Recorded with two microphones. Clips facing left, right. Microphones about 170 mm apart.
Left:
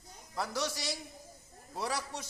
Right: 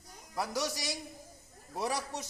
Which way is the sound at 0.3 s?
15° right (ahead or behind).